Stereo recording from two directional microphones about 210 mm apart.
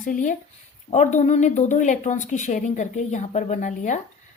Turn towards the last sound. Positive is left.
turn(degrees=35)  # may be behind; listen again after turning